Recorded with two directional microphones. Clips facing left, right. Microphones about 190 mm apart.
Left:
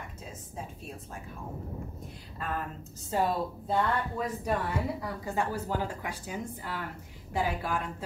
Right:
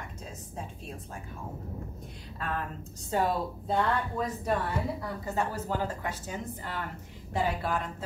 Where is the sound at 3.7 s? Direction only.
10° left (ahead or behind).